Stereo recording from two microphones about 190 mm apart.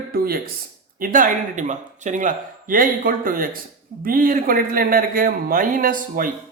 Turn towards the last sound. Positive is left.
turn(degrees=-45)  # may be behind; listen again after turning